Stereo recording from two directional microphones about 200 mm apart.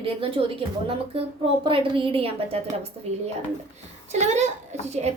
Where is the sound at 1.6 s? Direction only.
25° right (ahead or behind).